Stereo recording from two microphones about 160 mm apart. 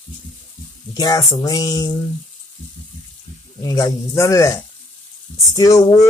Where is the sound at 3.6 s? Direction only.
20° left (ahead or behind).